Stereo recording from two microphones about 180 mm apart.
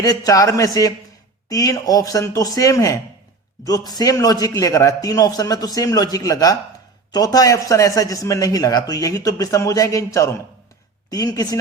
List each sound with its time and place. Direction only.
0.0 s speech: 20° left (ahead or behind)